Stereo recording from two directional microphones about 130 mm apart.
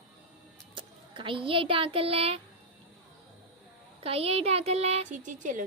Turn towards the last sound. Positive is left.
turn(degrees=-80)